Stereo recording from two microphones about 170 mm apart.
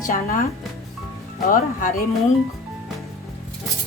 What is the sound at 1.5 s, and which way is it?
Speech, 55° left (ahead or behind).